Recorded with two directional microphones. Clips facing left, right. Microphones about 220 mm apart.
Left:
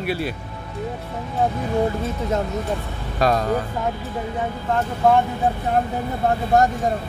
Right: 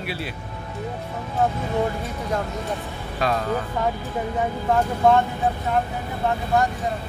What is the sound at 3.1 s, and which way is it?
Speech, 40° left (ahead or behind).